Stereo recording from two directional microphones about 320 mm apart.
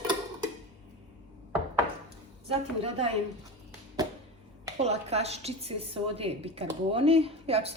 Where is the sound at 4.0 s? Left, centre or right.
Centre.